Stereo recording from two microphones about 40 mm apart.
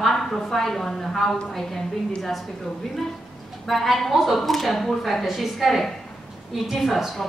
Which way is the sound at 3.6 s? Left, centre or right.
Centre.